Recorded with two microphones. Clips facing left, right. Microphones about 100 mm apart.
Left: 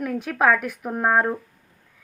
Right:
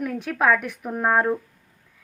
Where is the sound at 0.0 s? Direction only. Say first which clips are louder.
Left 1 dB; centre (ahead or behind).